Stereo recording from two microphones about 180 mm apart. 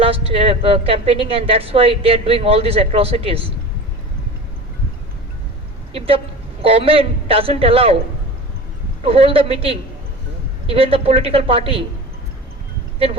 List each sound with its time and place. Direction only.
0.0 s a woman's voice: 30° right (ahead or behind)
5.9 s a woman's voice: 30° right (ahead or behind)
9.0 s a woman's voice: 30° right (ahead or behind)